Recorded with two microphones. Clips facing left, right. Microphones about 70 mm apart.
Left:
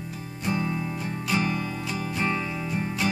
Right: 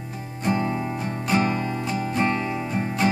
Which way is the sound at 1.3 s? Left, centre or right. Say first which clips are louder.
Right 4 dB; right.